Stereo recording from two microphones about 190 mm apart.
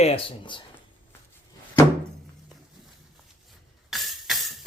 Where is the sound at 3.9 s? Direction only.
Centre (ahead or behind).